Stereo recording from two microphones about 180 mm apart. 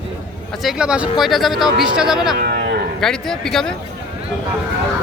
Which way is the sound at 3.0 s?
5° left (ahead or behind).